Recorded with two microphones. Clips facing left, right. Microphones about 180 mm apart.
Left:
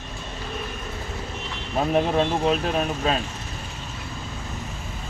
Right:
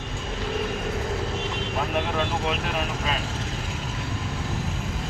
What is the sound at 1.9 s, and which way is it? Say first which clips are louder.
Speech: left 8 dB; 35° left (ahead or behind).